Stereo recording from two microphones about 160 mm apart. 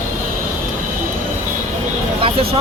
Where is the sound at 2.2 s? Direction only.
35° right (ahead or behind).